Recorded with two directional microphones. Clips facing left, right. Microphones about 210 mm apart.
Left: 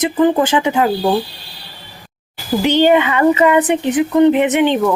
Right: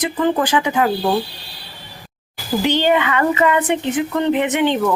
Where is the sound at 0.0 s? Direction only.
20° left (ahead or behind).